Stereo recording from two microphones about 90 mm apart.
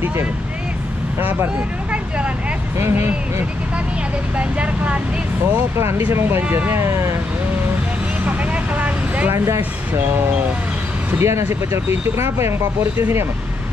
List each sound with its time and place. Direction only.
2.8 s speech: 30° right (ahead or behind)
4.4 s speech: 15° right (ahead or behind)
5.8 s speech: 30° right (ahead or behind)
8.3 s speech: 15° right (ahead or behind)
11.1 s speech: 30° right (ahead or behind)